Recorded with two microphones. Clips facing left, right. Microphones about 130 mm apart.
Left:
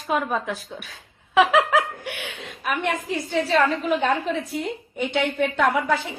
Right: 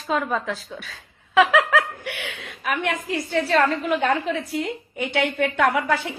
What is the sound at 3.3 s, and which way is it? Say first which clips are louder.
Speech: even; 15° left (ahead or behind).